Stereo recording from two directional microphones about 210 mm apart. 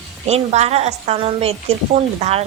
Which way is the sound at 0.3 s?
30° right (ahead or behind).